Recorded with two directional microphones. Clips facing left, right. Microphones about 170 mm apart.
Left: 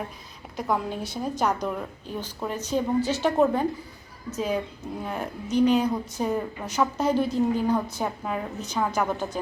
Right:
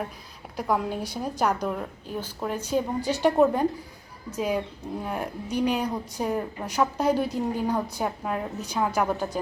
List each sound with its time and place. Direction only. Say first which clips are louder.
0.5 s a woman's voice: right 1 dB; 10° right (ahead or behind)